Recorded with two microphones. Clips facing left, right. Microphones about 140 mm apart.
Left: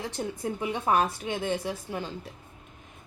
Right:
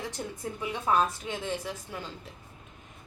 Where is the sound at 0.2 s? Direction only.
20° left (ahead or behind).